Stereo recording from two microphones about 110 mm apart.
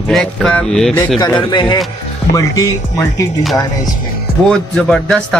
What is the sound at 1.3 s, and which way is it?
Speech, 45° left (ahead or behind).